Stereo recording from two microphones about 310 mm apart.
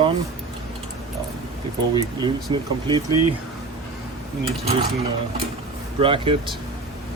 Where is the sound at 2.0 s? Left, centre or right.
Centre.